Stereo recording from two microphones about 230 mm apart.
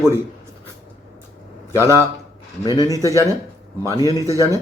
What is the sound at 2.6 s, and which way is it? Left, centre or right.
Speech, centre.